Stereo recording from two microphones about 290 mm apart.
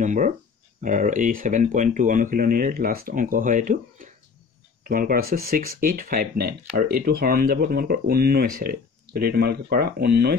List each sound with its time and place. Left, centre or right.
0.0 s speech: right